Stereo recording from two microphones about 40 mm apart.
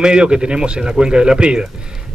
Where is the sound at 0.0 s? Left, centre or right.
Right.